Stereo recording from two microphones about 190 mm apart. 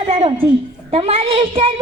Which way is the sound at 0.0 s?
30° right (ahead or behind).